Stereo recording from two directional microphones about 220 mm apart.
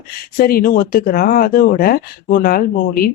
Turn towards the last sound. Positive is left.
turn(degrees=40)  # may be behind; listen again after turning